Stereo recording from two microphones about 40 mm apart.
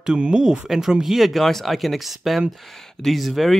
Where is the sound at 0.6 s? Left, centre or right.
Centre.